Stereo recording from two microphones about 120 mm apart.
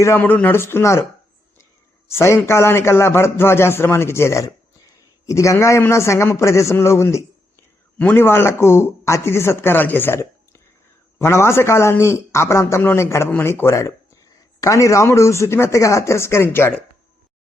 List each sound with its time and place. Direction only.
0.0 s a man's voice: 20° left (ahead or behind)
2.0 s a man's voice: 20° left (ahead or behind)